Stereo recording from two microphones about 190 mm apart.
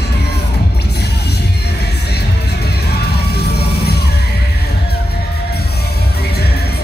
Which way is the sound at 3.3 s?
60° left (ahead or behind).